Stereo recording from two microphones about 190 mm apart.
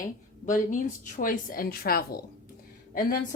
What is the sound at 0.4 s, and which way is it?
A woman's voice, 40° left (ahead or behind).